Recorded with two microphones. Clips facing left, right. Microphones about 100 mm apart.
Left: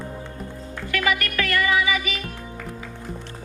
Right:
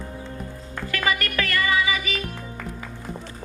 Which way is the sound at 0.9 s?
35° right (ahead or behind).